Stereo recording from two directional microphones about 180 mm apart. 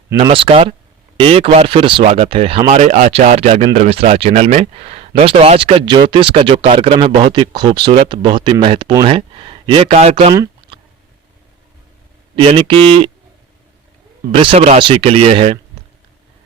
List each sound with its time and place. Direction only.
0.2 s speech: 30° right (ahead or behind)
12.4 s speech: 30° right (ahead or behind)
14.3 s speech: 35° right (ahead or behind)